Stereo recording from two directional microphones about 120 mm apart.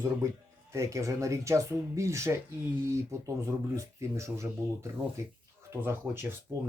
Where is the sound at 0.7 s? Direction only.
25° right (ahead or behind).